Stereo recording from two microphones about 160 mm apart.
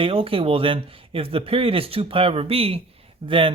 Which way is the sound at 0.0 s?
35° right (ahead or behind).